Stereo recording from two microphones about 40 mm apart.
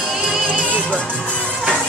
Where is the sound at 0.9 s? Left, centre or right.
Left.